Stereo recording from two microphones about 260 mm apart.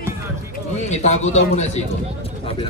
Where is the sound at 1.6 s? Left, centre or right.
Left.